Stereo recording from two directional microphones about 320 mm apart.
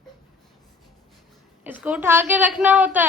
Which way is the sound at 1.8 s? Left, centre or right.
Centre.